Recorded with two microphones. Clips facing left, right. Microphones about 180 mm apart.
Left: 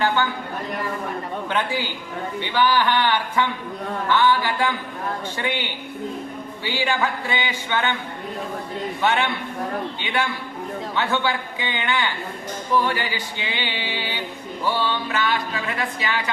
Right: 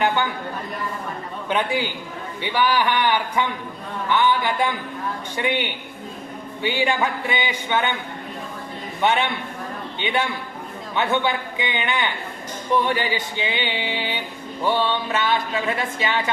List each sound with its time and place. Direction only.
1.5 s speech: 15° right (ahead or behind)
9.0 s a man's voice: 20° right (ahead or behind)